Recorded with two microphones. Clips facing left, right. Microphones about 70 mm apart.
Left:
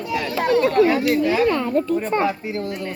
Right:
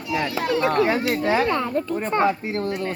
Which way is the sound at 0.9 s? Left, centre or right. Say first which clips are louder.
Left 3 dB; right.